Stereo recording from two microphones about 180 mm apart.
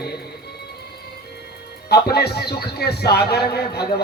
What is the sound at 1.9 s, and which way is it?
A man's voice, 60° left (ahead or behind).